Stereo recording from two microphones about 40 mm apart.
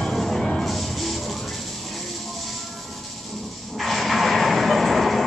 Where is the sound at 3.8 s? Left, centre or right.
Centre.